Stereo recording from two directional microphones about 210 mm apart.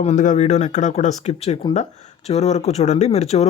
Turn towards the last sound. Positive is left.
turn(degrees=30)  # may be behind; listen again after turning